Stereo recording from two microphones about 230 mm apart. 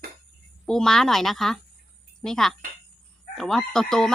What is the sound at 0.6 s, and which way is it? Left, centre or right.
A woman's voice, centre.